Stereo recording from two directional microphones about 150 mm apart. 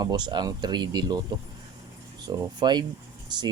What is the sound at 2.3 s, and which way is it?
Speech, 30° right (ahead or behind).